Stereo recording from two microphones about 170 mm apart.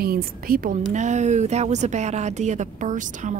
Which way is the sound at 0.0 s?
60° right (ahead or behind).